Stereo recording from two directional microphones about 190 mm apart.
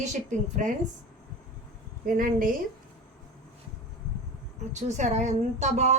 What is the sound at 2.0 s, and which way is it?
Speech, 50° right (ahead or behind).